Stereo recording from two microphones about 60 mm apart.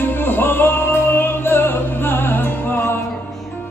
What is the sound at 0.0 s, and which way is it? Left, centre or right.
Music, left.